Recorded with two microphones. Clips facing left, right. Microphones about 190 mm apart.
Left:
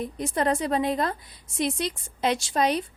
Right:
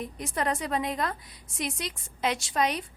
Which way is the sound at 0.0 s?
30° left (ahead or behind).